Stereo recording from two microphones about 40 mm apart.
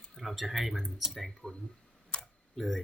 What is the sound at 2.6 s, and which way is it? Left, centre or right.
Speech, centre.